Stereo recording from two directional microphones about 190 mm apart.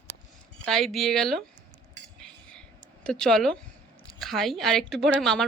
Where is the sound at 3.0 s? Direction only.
5° left (ahead or behind).